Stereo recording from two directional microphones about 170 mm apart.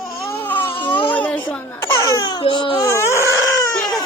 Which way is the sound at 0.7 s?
30° left (ahead or behind).